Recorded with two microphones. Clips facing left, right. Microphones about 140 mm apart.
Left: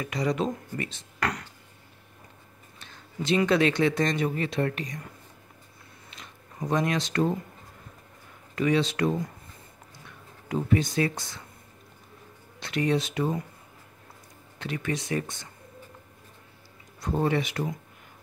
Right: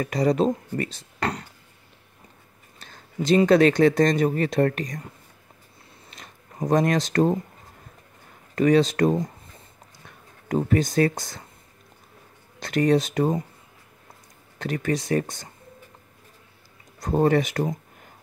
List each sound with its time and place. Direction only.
0.0 s speech: 40° right (ahead or behind)
2.8 s speech: 40° right (ahead or behind)
6.0 s a sound: 45° right (ahead or behind)
8.5 s speech: 45° right (ahead or behind)
12.5 s speech: 45° right (ahead or behind)
14.6 s speech: 40° right (ahead or behind)
17.0 s speech: 45° right (ahead or behind)